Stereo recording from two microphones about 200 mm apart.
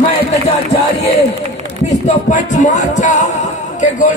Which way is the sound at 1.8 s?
35° left (ahead or behind).